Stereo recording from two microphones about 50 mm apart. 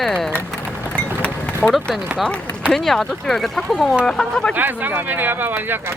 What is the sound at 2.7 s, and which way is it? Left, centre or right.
Speech, centre.